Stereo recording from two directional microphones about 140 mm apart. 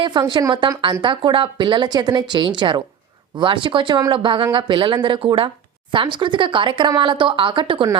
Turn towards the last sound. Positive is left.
turn(degrees=-35)  # may be behind; listen again after turning